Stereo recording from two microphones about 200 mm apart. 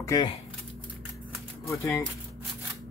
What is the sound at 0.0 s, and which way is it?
Speech, 20° left (ahead or behind).